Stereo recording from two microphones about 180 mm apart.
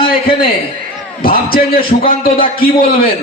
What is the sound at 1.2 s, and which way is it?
A man's voice, 55° left (ahead or behind).